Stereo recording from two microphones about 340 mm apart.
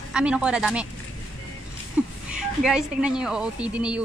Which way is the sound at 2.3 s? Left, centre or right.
Centre.